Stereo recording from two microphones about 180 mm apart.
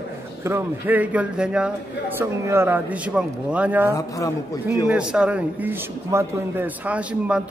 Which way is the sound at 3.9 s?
20° left (ahead or behind).